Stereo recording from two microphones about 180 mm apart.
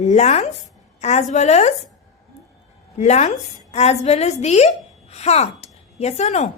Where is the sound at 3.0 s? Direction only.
40° left (ahead or behind).